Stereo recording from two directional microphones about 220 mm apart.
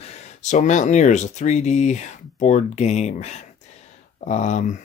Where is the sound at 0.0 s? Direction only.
35° left (ahead or behind).